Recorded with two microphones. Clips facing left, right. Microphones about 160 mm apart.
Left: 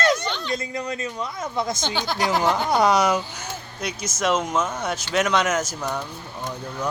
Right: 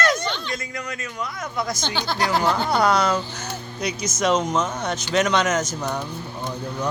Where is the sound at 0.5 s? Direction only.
30° left (ahead or behind).